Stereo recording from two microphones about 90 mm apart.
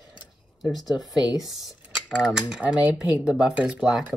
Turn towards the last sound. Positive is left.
turn(degrees=-10)  # may be behind; listen again after turning